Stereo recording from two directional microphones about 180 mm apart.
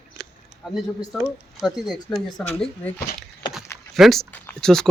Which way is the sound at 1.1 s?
Centre (ahead or behind).